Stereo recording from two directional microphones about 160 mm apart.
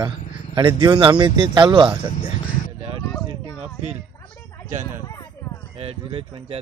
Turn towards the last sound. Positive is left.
turn(degrees=-40)  # may be behind; listen again after turning